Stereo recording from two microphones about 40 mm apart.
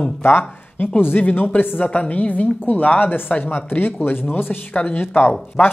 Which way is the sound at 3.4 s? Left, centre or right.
Left.